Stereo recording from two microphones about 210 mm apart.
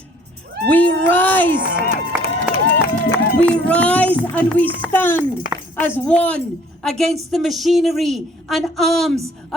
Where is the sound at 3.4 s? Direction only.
5° left (ahead or behind).